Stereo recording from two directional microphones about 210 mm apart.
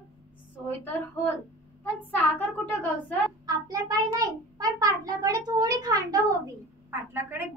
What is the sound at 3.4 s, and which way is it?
A child's voice, 15° right (ahead or behind).